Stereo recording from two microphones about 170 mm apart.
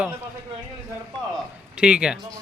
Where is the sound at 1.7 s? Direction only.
5° right (ahead or behind).